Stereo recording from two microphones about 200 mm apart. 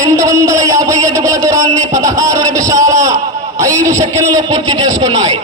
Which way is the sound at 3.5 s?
15° right (ahead or behind).